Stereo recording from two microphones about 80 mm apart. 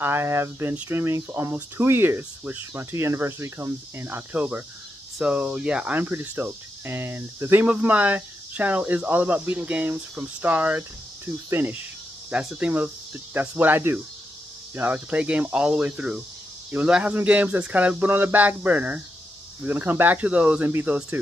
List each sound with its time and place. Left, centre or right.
0.0 s speech: right
5.9 s speech: right
7.6 s speech: centre